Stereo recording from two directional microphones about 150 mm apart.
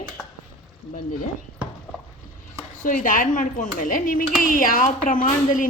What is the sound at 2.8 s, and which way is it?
Speech, 65° left (ahead or behind).